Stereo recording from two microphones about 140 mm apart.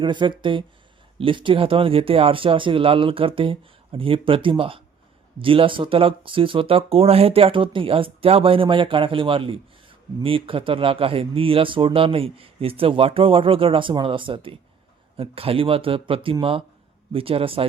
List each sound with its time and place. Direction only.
0.0 s speech: 35° right (ahead or behind)